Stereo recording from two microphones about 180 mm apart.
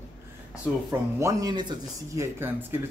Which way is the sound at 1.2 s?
20° right (ahead or behind).